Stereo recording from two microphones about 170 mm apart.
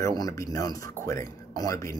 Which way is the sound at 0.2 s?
20° left (ahead or behind).